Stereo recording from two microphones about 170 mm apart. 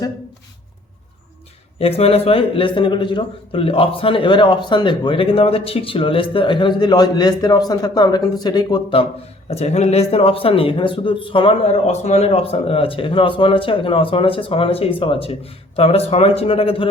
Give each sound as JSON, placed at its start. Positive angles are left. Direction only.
{"t": 1.8, "sound": "a man's voice", "side_deg": 35}
{"t": 9.5, "sound": "a man's voice", "side_deg": 40}